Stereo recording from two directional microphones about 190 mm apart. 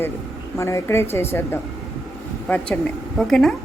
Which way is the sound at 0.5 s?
15° left (ahead or behind).